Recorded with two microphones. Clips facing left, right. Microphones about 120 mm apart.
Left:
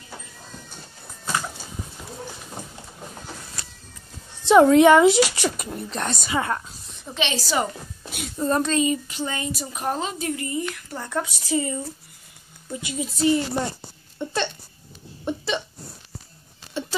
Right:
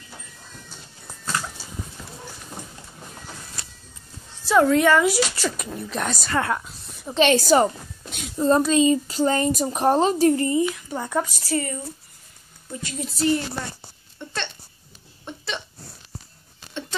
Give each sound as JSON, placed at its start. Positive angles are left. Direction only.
{"t": 4.5, "sound": "speech", "side_deg": 20}
{"t": 5.8, "sound": "a woman's voice", "side_deg": 0}
{"t": 6.2, "sound": "speech", "side_deg": 10}
{"t": 6.5, "sound": "a sound", "side_deg": 0}
{"t": 7.2, "sound": "a woman's voice", "side_deg": -50}
{"t": 8.4, "sound": "a woman's voice", "side_deg": -20}
{"t": 10.6, "sound": "a woman's voice", "side_deg": -15}
{"t": 11.5, "sound": "speech", "side_deg": 20}
{"t": 12.7, "sound": "a woman's voice", "side_deg": 5}
{"t": 14.1, "sound": "a sound", "side_deg": 10}
{"t": 15.2, "sound": "hiccup", "side_deg": 5}
{"t": 16.8, "sound": "a sound", "side_deg": 5}